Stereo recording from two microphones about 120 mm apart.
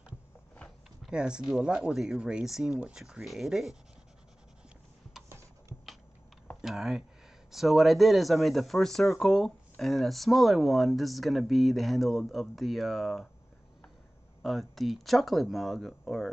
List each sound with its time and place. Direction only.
1.0 s speech: 5° right (ahead or behind)
5.7 s typing: 20° left (ahead or behind)
6.6 s speech: centre (ahead or behind)
14.4 s speech: centre (ahead or behind)